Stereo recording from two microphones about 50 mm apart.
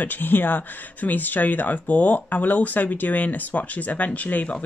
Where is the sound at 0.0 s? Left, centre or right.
Left.